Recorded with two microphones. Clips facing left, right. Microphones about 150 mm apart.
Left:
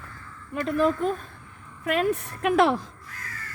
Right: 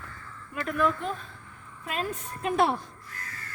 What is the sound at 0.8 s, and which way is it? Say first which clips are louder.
Speech: left 4 dB; 35° left (ahead or behind).